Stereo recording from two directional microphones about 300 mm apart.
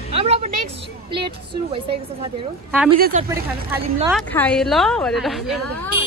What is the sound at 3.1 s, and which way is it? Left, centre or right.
Speech, right.